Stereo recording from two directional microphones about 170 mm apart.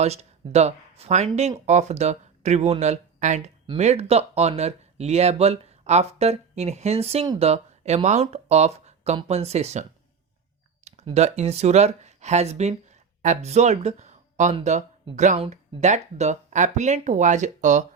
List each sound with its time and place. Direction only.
0.0 s speech: 40° right (ahead or behind)
10.8 s speech: 40° right (ahead or behind)